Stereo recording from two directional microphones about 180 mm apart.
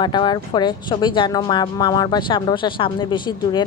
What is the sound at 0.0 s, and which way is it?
A woman's voice, 25° left (ahead or behind).